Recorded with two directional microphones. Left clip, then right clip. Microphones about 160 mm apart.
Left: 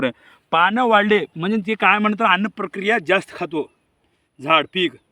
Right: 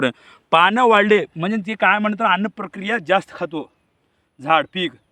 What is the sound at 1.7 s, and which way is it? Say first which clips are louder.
Speech: even; 25° right (ahead or behind).